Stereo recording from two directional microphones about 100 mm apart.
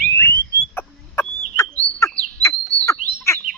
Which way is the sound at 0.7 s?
25° left (ahead or behind).